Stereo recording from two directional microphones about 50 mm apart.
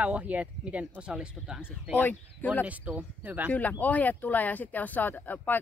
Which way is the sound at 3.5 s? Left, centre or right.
Left.